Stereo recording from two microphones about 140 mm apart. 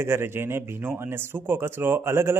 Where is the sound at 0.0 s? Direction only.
15° right (ahead or behind).